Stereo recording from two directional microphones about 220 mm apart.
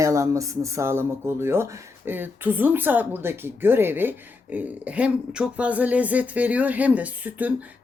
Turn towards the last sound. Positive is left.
turn(degrees=-5)  # may be behind; listen again after turning